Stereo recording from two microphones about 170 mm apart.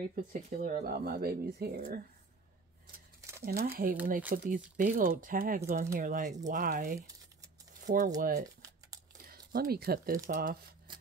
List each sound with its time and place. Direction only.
0.1 s speech: 55° right (ahead or behind)
3.4 s speech: 60° right (ahead or behind)
9.5 s speech: 60° right (ahead or behind)